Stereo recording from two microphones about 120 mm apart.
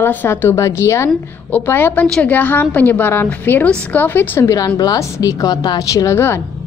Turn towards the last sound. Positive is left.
turn(degrees=20)  # may be behind; listen again after turning